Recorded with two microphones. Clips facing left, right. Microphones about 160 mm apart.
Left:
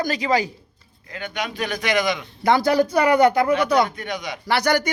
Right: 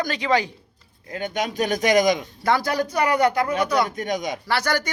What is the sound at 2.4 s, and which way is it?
Speech, 25° left (ahead or behind).